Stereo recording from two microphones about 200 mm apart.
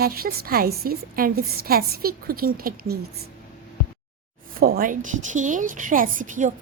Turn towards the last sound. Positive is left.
turn(degrees=-40)  # may be behind; listen again after turning